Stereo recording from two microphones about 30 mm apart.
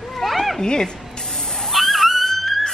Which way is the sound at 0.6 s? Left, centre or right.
Left.